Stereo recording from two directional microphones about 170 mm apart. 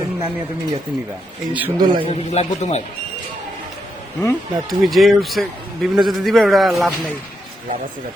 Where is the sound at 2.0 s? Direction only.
40° left (ahead or behind).